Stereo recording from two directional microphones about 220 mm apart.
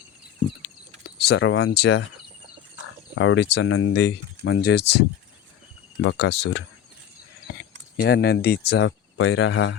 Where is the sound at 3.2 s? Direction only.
55° left (ahead or behind).